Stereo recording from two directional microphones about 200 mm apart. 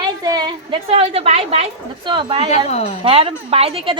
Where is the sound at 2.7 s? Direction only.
30° left (ahead or behind).